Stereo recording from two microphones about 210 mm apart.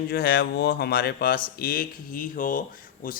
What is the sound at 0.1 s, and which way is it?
Speech, 50° left (ahead or behind).